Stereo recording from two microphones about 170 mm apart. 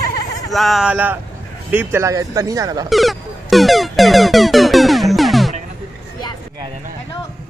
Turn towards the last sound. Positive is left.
turn(degrees=0)  # may be behind; listen again after turning